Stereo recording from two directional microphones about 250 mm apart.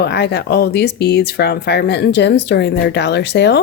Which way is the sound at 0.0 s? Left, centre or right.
Left.